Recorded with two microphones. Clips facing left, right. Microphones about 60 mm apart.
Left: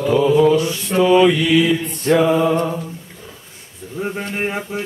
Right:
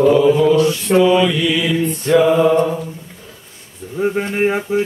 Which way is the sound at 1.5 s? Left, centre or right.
Centre.